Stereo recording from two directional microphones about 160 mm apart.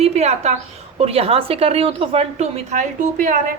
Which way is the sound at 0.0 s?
40° right (ahead or behind).